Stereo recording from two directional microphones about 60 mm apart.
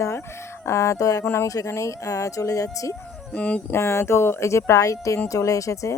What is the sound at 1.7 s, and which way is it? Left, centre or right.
Speech, left.